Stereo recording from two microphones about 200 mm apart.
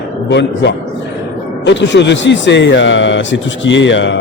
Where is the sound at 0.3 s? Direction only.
60° left (ahead or behind).